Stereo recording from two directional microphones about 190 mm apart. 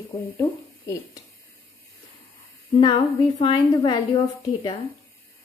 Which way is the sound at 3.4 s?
25° left (ahead or behind).